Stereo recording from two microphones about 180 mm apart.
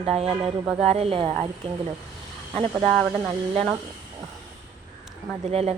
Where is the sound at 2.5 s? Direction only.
35° right (ahead or behind).